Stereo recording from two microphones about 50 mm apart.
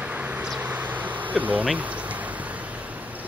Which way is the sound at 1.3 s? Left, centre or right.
Right.